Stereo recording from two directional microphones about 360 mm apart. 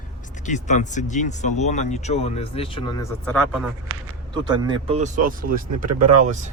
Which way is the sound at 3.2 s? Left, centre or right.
Centre.